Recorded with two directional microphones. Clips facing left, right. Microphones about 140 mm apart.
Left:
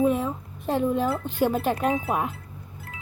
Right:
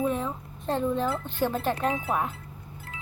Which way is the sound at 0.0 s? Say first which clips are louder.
Left 5 dB; 10° left (ahead or behind).